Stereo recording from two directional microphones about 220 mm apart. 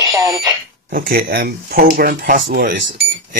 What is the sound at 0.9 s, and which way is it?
Speech, 40° right (ahead or behind).